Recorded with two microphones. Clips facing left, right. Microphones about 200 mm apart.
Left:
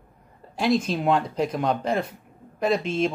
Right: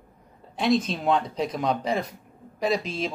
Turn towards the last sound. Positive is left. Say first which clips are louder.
# left 3 dB
turn(degrees=0)  # may be behind; listen again after turning